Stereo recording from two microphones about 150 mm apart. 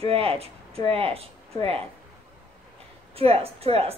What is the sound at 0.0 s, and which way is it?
Speech, 40° right (ahead or behind).